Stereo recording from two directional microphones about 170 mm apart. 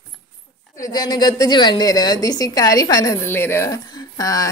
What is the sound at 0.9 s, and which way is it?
A woman's voice, 25° left (ahead or behind).